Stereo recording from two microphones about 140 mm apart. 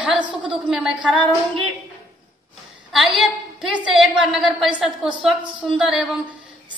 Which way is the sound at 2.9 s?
Centre (ahead or behind).